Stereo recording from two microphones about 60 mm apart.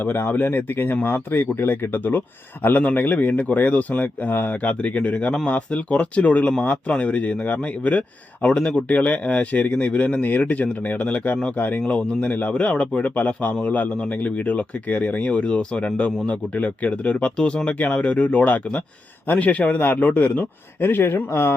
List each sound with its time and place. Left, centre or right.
0.0 s a man's voice: left